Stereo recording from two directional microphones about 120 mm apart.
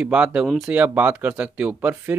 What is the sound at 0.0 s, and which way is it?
Speech, 10° right (ahead or behind).